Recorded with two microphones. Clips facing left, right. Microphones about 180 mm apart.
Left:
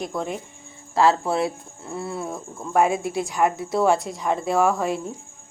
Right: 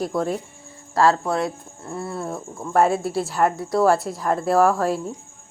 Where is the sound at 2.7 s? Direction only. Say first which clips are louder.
Right 1 dB; 15° left (ahead or behind).